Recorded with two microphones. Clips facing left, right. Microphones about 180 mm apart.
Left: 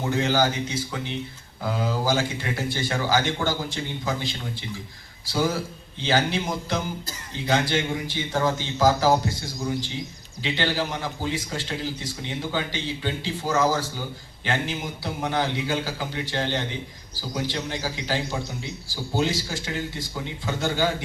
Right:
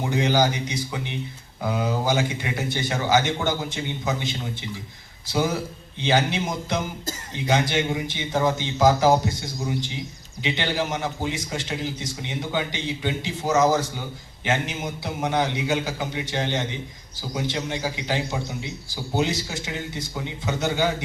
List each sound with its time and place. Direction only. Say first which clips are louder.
0.0 s a man's voice: right 1 dB; 15° right (ahead or behind)
5.2 s a man's voice: right 1 dB; 20° right (ahead or behind)
10.4 s a man's voice: even; 20° right (ahead or behind)